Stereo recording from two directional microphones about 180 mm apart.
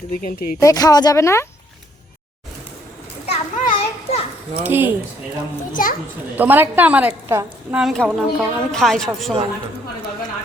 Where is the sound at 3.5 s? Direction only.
45° left (ahead or behind).